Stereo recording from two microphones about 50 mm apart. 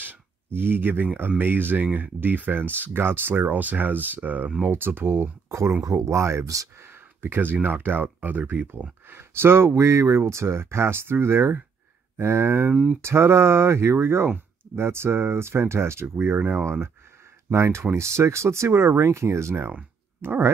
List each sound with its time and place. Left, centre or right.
0.0 s a sound: right
1.4 s speech: right
4.6 s speech: right
6.9 s speech: right
9.1 s speech: right
16.3 s speech: right
17.5 s speech: right
20.2 s speech: right